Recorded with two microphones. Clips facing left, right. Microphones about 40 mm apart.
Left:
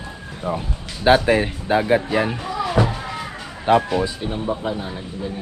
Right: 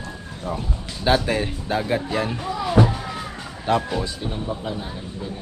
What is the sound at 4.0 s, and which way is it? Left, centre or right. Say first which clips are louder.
Speech: left 4 dB; centre.